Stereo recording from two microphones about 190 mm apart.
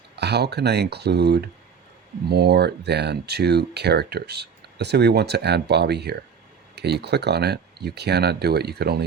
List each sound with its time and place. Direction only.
0.2 s speech: 60° right (ahead or behind)